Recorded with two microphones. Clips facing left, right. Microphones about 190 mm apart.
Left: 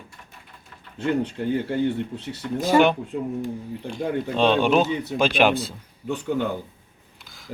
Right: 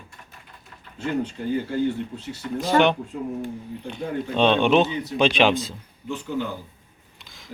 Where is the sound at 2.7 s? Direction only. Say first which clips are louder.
Left 1 dB; 10° left (ahead or behind).